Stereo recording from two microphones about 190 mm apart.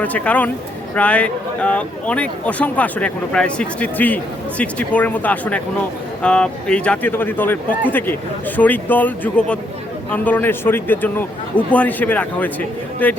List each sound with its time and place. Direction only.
0.0 s speech: 10° left (ahead or behind)